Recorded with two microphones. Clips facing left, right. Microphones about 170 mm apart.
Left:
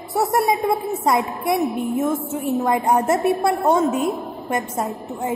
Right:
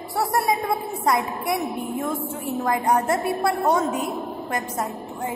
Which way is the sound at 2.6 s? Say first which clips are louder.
Left 1 dB; 25° left (ahead or behind).